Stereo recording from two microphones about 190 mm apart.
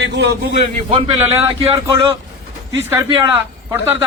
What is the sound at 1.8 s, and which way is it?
A man's voice, 15° right (ahead or behind).